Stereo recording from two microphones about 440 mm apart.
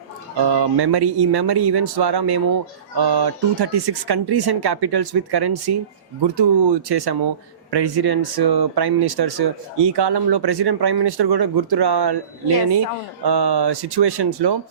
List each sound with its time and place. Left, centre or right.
0.4 s speech: right
13.2 s speech: right